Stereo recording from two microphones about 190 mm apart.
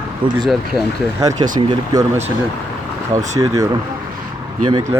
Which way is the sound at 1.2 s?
20° right (ahead or behind).